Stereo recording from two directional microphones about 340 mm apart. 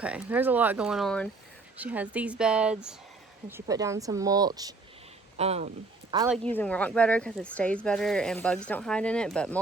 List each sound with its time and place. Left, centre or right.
0.0 s speech: centre
6.2 s speech: centre